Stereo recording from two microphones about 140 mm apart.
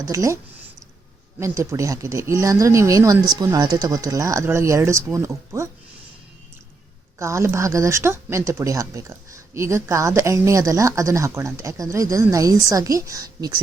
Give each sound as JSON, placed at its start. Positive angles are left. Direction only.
{"t": 0.0, "sound": "speech", "side_deg": -20}
{"t": 1.4, "sound": "speech", "side_deg": -20}
{"t": 7.2, "sound": "speech", "side_deg": -20}